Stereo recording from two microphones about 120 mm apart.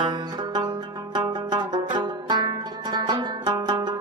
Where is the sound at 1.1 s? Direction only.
40° right (ahead or behind).